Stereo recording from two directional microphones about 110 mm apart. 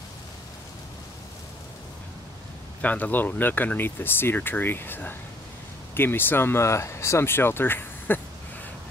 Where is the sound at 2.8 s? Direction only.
15° left (ahead or behind).